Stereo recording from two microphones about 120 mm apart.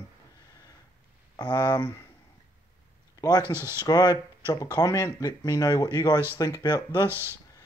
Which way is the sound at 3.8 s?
35° left (ahead or behind).